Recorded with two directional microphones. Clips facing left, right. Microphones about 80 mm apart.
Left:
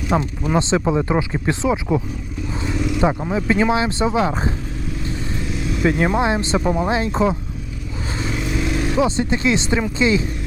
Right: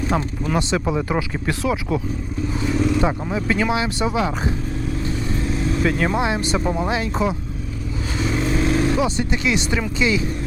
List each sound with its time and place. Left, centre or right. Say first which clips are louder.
0.1 s speech: left 6 dB; left
2.7 s speech: right 4 dB; right
3.3 s speech: left 3 dB; left
5.5 s vehicle: right 3 dB; right
5.8 s speech: left 4 dB; centre
8.3 s vehicle: right 3 dB; right
9.0 s speech: left 3 dB; left